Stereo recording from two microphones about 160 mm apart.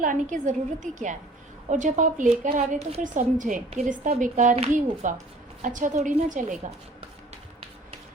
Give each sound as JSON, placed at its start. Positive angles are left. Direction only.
{"t": 0.0, "sound": "a woman's voice", "side_deg": -55}